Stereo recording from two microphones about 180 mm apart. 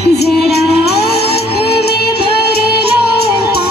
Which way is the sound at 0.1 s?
65° left (ahead or behind).